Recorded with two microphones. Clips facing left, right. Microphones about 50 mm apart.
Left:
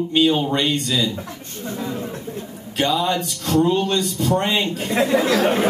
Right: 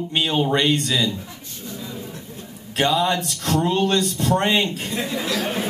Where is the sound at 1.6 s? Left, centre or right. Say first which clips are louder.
Left 7 dB; left.